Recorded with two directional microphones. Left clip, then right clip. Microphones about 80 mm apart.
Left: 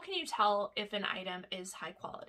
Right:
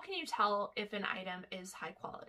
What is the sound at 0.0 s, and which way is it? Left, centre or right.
Speech, left.